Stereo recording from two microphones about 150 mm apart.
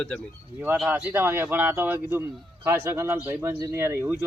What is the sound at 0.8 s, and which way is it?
Speech, 15° right (ahead or behind).